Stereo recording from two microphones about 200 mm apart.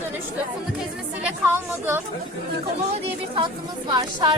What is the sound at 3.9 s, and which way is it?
Speech, 20° right (ahead or behind).